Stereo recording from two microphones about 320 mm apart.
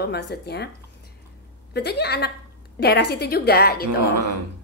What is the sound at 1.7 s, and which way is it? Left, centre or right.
A woman's voice, left.